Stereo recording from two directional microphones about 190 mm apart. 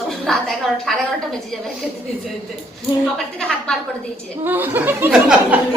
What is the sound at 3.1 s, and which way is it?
Speech, 5° left (ahead or behind).